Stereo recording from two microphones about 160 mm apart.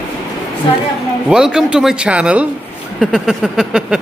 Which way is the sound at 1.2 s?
5° right (ahead or behind).